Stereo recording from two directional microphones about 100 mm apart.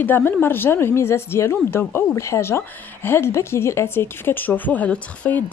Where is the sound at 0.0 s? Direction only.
20° left (ahead or behind).